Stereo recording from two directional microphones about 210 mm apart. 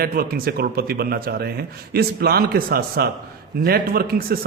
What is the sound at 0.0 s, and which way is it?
A man's voice, 45° right (ahead or behind).